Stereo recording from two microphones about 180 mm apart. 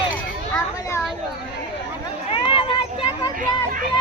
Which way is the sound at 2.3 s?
30° left (ahead or behind).